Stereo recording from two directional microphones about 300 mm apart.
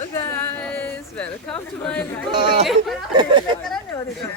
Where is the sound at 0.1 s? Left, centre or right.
Centre.